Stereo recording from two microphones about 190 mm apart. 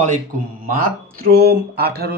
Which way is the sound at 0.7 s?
50° right (ahead or behind).